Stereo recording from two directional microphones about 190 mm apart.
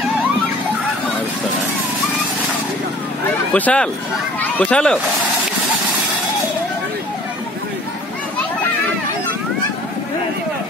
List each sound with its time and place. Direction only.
3.5 s speech: 5° left (ahead or behind)